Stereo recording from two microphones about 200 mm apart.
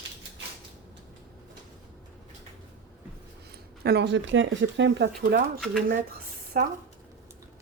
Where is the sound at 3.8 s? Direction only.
60° right (ahead or behind).